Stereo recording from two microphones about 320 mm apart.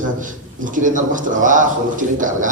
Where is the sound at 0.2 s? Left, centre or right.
Right.